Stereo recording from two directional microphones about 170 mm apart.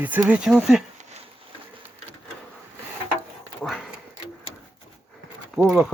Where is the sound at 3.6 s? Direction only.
Centre (ahead or behind).